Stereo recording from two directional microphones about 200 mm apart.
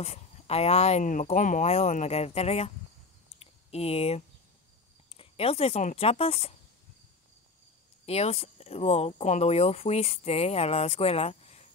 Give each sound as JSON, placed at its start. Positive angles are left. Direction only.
{"t": 0.0, "sound": "speech", "side_deg": 30}
{"t": 3.3, "sound": "a sound", "side_deg": 30}
{"t": 5.1, "sound": "speech", "side_deg": 30}
{"t": 8.0, "sound": "speech", "side_deg": 30}